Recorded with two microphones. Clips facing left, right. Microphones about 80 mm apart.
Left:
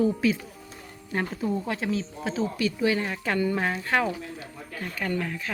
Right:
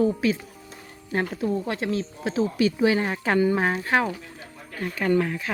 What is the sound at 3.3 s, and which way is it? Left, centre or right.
Speech, centre.